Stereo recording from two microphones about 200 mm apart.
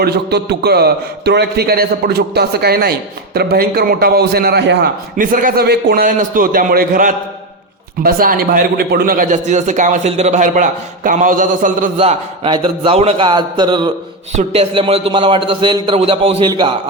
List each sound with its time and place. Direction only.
0.0 s a man's voice: 55° right (ahead or behind)
5.1 s a man's voice: 45° right (ahead or behind)
11.9 s a man's voice: 30° right (ahead or behind)